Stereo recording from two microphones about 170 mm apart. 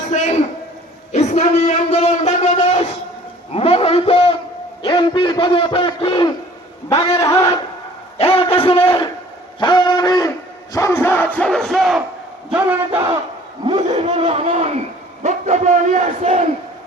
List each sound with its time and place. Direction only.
0.1 s a sound: 45° left (ahead or behind)
1.1 s a man's voice: 40° left (ahead or behind); by 13.0 s 5° right (ahead or behind)
13.8 s a man's voice: 35° right (ahead or behind)